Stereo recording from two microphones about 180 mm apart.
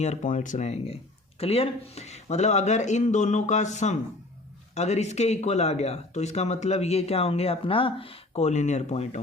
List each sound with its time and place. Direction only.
0.0 s speech: 40° left (ahead or behind)